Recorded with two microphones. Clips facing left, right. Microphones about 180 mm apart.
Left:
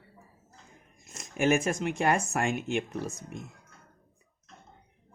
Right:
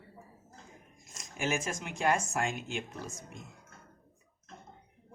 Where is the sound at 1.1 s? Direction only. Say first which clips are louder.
Left 8 dB; 60° left (ahead or behind).